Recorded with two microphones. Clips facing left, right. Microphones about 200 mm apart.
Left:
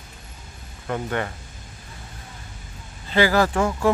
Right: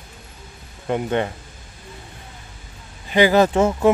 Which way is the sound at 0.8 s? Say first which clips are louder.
Right 5 dB; 20° right (ahead or behind).